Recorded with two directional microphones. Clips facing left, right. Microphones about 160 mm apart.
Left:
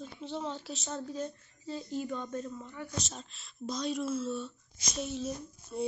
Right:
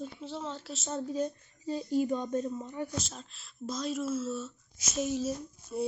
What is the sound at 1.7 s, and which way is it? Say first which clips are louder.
Speech: right 7 dB; 15° right (ahead or behind).